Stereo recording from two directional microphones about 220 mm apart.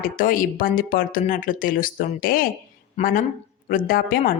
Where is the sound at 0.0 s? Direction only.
40° left (ahead or behind).